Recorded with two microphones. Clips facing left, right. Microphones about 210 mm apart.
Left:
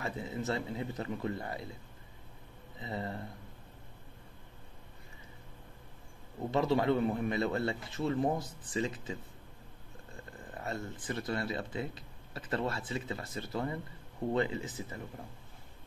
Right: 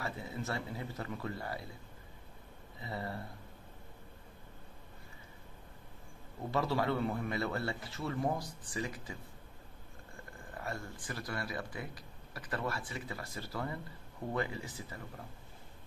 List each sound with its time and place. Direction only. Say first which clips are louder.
0.0 s speech: left 4 dB; 20° left (ahead or behind)
2.8 s speech: left 2 dB; 20° left (ahead or behind)
6.5 s speech: left 4 dB; 20° left (ahead or behind)
10.6 s speech: left 3 dB; 20° left (ahead or behind)